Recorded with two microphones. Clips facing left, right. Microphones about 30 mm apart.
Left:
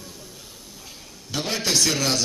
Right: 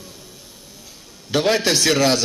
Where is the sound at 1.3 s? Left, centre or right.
Right.